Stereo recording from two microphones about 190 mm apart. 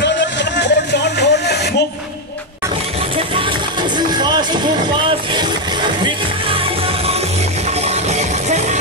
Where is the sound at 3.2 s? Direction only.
30° right (ahead or behind).